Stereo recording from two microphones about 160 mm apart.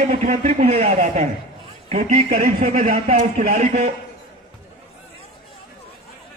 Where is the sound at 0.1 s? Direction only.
50° right (ahead or behind).